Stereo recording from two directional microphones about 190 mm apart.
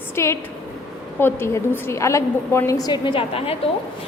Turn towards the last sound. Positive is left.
turn(degrees=30)  # may be behind; listen again after turning